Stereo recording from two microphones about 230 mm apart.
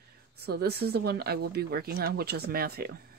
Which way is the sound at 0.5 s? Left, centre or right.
Right.